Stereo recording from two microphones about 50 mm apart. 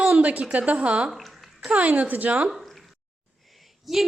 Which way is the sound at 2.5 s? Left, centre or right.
Centre.